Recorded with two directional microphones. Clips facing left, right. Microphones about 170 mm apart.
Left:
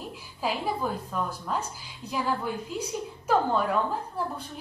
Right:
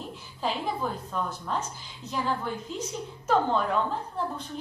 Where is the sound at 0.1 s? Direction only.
5° left (ahead or behind).